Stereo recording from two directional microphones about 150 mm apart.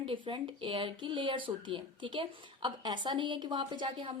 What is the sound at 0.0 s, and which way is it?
Speech, 35° right (ahead or behind).